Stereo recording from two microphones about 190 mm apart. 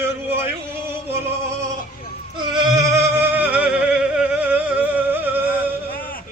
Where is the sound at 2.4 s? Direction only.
25° right (ahead or behind).